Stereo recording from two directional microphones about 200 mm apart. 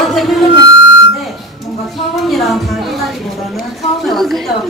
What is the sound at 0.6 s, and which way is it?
Music, 60° left (ahead or behind).